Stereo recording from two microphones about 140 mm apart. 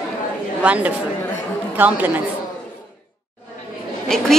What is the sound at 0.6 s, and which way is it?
A woman's voice, 10° right (ahead or behind).